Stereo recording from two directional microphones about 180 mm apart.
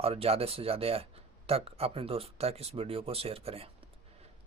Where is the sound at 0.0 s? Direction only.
35° right (ahead or behind).